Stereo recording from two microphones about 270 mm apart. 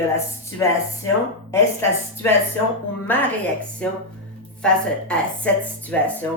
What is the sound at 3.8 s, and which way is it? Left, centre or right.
Speech, centre.